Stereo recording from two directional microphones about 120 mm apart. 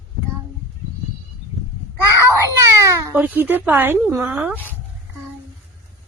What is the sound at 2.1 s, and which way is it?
Baby cry, 25° right (ahead or behind).